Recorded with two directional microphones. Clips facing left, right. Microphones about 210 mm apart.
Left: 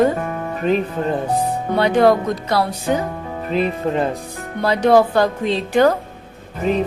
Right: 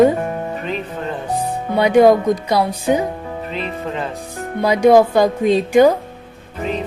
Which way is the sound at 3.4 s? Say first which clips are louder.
Left 8 dB; 40° left (ahead or behind).